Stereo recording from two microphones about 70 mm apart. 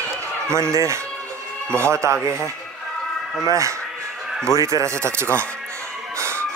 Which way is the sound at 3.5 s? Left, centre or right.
Right.